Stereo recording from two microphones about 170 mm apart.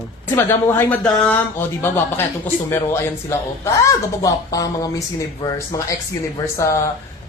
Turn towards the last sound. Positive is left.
turn(degrees=15)  # may be behind; listen again after turning